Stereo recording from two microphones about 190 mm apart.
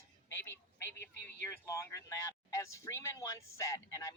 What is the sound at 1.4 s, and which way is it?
Speech, 15° left (ahead or behind).